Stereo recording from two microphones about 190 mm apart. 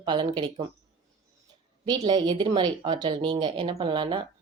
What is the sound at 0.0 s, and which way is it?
Speech, 25° right (ahead or behind).